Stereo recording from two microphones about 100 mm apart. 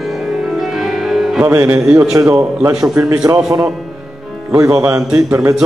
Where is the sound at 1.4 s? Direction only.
25° right (ahead or behind).